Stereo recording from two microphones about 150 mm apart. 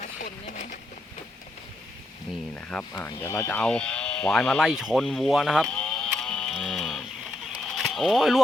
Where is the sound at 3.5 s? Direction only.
10° left (ahead or behind).